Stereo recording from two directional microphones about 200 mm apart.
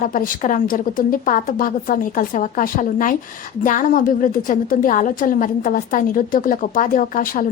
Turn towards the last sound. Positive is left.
turn(degrees=40)  # may be behind; listen again after turning